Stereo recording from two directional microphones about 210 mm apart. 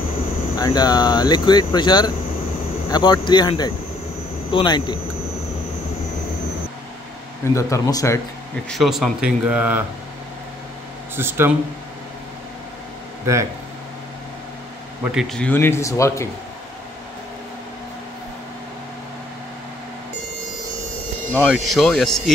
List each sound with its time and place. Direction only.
0.6 s speech: 20° left (ahead or behind)
7.5 s speech: 15° left (ahead or behind)
8.6 s speech: centre (ahead or behind)
11.1 s speech: 10° right (ahead or behind)
13.2 s speech: 15° right (ahead or behind)
15.0 s speech: centre (ahead or behind)
21.3 s speech: centre (ahead or behind)